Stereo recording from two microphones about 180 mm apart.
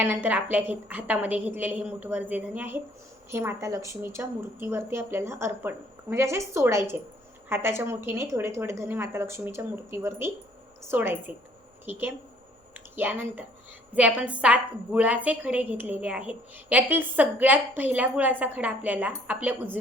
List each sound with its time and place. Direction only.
0.0 s a woman's voice: 10° right (ahead or behind)